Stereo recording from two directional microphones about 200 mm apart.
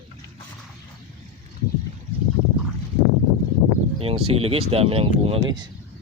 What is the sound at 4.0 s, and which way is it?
Speech, 30° right (ahead or behind).